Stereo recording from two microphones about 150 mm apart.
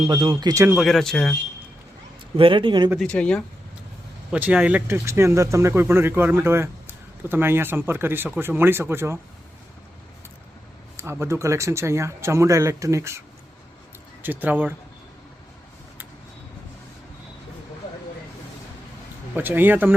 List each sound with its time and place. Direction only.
0.1 s a man's voice: 30° right (ahead or behind)
0.7 s speech: centre (ahead or behind)
2.3 s a man's voice: 35° right (ahead or behind)
3.0 s speech: 5° left (ahead or behind)
4.3 s speech: 10° right (ahead or behind)
10.9 s a man's voice: 15° right (ahead or behind)
19.3 s speech: 15° right (ahead or behind)